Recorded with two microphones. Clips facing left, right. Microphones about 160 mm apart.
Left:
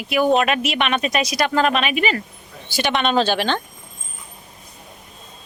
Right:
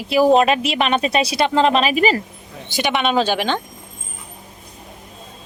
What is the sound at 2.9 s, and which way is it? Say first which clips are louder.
Speech: right 1 dB; 10° right (ahead or behind).